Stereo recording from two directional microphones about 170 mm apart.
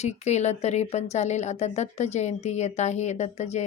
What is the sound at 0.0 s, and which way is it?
Speech, 40° left (ahead or behind).